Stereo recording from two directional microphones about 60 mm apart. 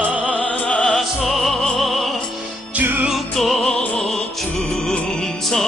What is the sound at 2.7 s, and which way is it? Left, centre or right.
Music, right.